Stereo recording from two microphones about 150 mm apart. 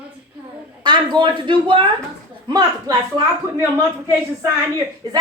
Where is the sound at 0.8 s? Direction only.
30° right (ahead or behind).